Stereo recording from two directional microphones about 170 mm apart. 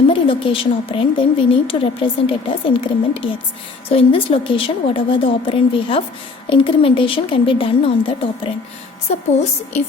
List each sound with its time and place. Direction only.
0.1 s a woman's voice: 30° left (ahead or behind)